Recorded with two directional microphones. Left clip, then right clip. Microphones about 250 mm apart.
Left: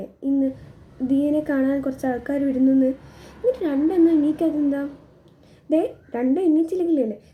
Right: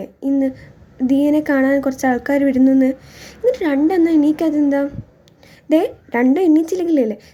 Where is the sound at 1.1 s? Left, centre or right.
Right.